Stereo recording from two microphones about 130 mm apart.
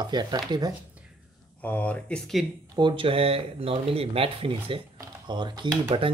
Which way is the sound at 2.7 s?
35° right (ahead or behind).